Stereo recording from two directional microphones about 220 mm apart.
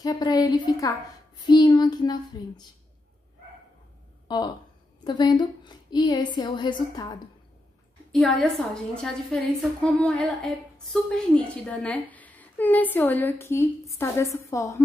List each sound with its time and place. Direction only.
0.0 s a woman's voice: 20° left (ahead or behind)
5.0 s a woman's voice: 20° left (ahead or behind)
8.1 s a woman's voice: centre (ahead or behind)